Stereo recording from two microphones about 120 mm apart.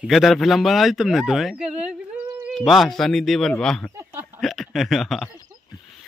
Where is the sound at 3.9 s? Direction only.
15° right (ahead or behind).